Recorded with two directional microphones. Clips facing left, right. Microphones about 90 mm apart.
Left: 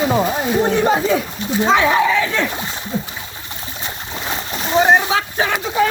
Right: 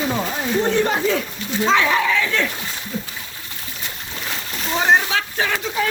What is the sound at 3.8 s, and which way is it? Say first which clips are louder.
Splash: left 4 dB; 25° left (ahead or behind).